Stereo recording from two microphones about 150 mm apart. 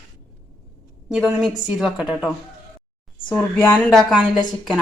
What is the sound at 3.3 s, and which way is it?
Speech, 15° left (ahead or behind).